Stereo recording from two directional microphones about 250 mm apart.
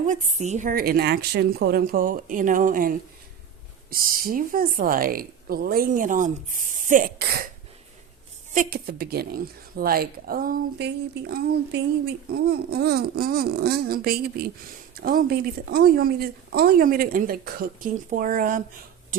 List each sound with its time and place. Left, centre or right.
0.1 s speech: right
8.5 s speech: right